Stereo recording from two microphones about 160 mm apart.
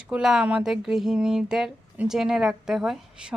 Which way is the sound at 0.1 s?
5° right (ahead or behind).